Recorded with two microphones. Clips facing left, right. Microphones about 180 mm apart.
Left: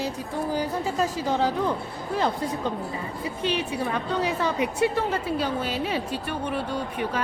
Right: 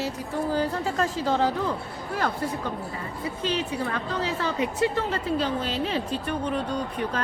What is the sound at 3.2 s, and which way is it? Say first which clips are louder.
A woman's voice: even; 15° left (ahead or behind).